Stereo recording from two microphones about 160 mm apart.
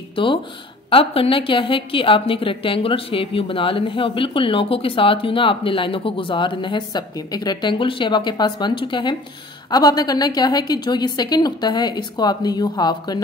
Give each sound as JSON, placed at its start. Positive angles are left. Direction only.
{"t": 0.1, "sound": "a woman's voice", "side_deg": 30}